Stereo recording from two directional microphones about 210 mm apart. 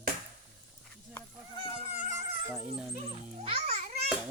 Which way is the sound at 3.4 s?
30° right (ahead or behind).